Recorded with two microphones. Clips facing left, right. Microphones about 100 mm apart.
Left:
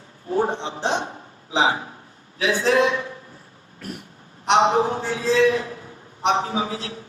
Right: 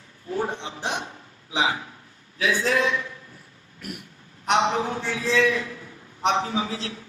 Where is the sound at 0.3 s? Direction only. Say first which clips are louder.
Left 5 dB; 35° left (ahead or behind).